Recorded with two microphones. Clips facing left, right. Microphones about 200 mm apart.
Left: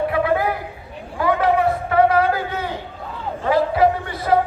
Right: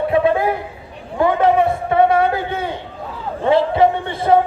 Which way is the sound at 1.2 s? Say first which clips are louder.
Right 3 dB; 25° right (ahead or behind).